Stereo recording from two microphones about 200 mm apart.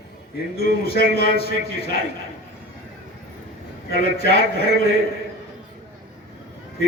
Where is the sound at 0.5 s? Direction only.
50° left (ahead or behind).